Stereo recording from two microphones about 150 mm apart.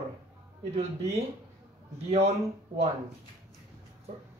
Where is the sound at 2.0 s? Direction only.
45° right (ahead or behind).